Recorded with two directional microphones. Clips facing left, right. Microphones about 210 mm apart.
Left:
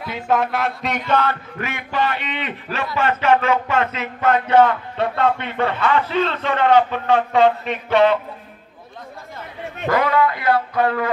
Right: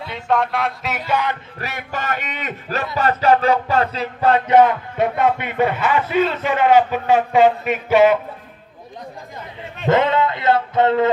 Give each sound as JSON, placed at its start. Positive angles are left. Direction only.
{"t": 0.1, "sound": "a sound", "side_deg": 0}
{"t": 1.6, "sound": "a man's voice", "side_deg": -40}
{"t": 3.0, "sound": "music", "side_deg": -35}
{"t": 4.5, "sound": "speech", "side_deg": -15}
{"t": 9.8, "sound": "speech", "side_deg": -25}